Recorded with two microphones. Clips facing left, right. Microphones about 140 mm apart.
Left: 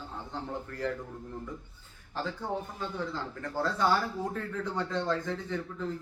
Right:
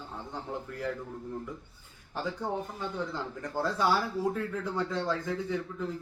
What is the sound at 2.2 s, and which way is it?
A man's voice, 15° right (ahead or behind).